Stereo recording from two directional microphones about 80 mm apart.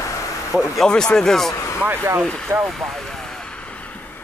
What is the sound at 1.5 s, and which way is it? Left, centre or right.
Vehicle, left.